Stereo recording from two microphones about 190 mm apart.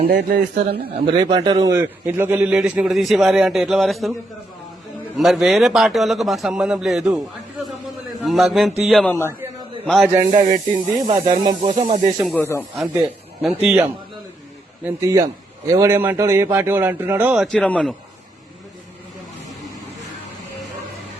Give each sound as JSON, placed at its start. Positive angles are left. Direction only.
{"t": 0.1, "sound": "a man's voice", "side_deg": -60}
{"t": 1.0, "sound": "a man's voice", "side_deg": -25}
{"t": 5.1, "sound": "a man's voice", "side_deg": 0}
{"t": 8.2, "sound": "a man's voice", "side_deg": 0}
{"t": 10.3, "sound": "speech", "side_deg": -40}
{"t": 10.9, "sound": "speech", "side_deg": -25}
{"t": 11.7, "sound": "speech", "side_deg": -40}
{"t": 12.3, "sound": "speech", "side_deg": 10}
{"t": 12.7, "sound": "a man's voice", "side_deg": 0}
{"t": 14.8, "sound": "a man's voice", "side_deg": -15}